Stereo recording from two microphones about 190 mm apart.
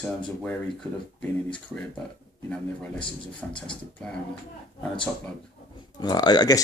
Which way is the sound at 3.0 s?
25° left (ahead or behind).